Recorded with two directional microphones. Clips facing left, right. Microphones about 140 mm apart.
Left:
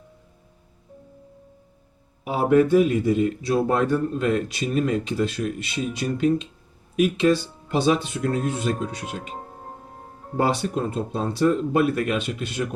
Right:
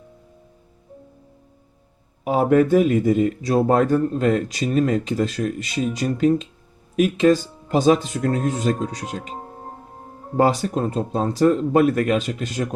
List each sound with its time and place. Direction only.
2.2 s speech: 45° right (ahead or behind)
10.3 s speech: 40° right (ahead or behind)